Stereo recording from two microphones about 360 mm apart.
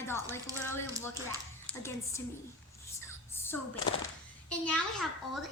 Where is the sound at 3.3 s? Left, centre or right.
Centre.